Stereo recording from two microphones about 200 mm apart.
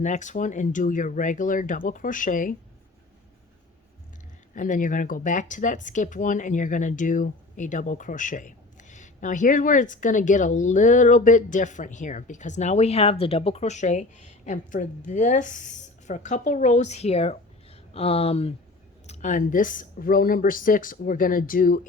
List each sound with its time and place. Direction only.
0.0 s speech: 35° left (ahead or behind)
4.5 s speech: 40° left (ahead or behind)